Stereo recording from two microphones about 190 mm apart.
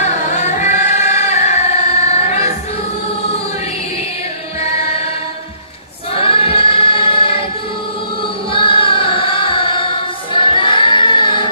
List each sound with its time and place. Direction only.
0.0 s singing: 40° left (ahead or behind)
4.6 s music: 35° left (ahead or behind)
6.1 s choir: 30° left (ahead or behind)
8.5 s music: 30° left (ahead or behind)
10.3 s choir: 25° left (ahead or behind)